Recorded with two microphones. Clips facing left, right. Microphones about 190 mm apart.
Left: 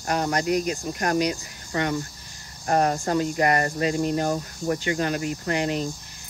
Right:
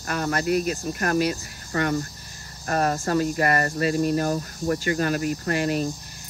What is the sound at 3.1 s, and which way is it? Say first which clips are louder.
Speech: even; 60° right (ahead or behind).